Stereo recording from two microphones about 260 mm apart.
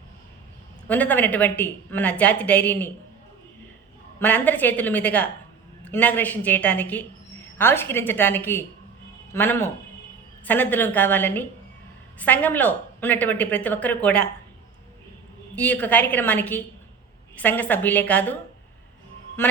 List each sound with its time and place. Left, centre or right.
0.9 s a woman's voice: centre
4.2 s a woman's voice: centre
15.5 s a woman's voice: centre